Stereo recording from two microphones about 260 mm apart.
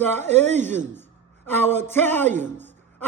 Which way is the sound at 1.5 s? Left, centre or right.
Centre.